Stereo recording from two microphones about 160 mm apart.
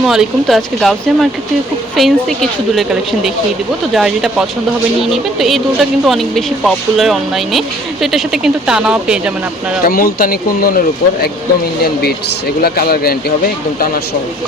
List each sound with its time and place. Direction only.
0.0 s speech: centre (ahead or behind)
9.8 s speech: 60° left (ahead or behind)
12.6 s speech: 70° left (ahead or behind)